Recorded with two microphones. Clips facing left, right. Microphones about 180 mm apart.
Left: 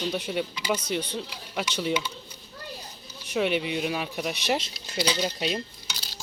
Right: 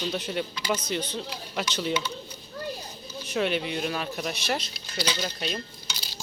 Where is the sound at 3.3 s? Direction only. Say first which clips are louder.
Left 1 dB; 10° left (ahead or behind).